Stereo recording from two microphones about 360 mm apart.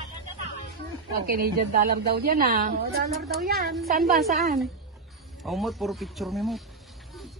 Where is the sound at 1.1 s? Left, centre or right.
Right.